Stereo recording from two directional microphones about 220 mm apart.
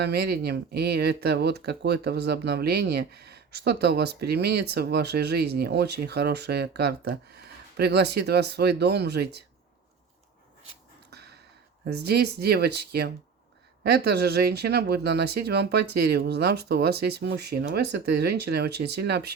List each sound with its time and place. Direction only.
0.0 s speech: 45° right (ahead or behind)
11.1 s a sound: 50° right (ahead or behind)
11.9 s speech: 45° right (ahead or behind)